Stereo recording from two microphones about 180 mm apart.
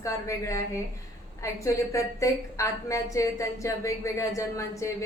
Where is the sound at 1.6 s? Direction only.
15° left (ahead or behind).